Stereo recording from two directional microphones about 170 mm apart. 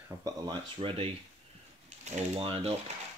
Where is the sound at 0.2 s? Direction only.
30° right (ahead or behind).